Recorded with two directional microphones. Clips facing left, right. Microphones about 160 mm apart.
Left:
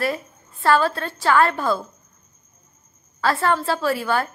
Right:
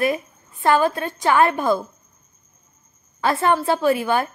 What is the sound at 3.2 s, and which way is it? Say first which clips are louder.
A woman's voice: right 2 dB; 20° right (ahead or behind).